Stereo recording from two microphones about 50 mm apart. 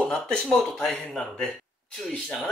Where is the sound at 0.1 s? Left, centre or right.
Centre.